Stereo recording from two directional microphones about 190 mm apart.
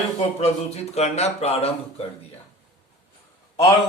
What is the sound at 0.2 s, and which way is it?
Speech, 30° left (ahead or behind).